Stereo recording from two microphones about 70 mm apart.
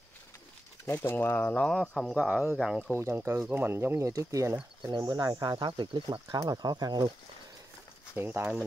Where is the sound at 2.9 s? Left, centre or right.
Right.